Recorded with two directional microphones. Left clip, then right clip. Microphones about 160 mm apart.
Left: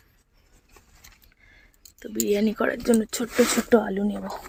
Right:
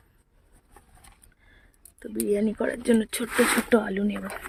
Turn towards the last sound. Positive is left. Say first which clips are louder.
# left 2 dB
turn(degrees=5)  # may be behind; listen again after turning